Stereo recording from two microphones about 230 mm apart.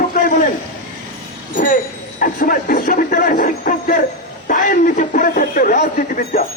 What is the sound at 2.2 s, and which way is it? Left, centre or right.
A man's voice, left.